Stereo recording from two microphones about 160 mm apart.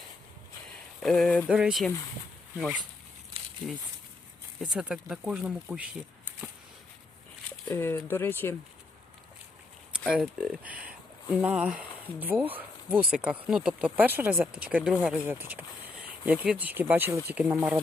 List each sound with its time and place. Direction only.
0.9 s speech: centre (ahead or behind)
4.6 s speech: 5° right (ahead or behind)
7.7 s speech: 15° left (ahead or behind)
10.1 s speech: 5° right (ahead or behind)